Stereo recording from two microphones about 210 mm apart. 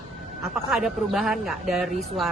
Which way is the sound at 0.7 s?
Centre (ahead or behind).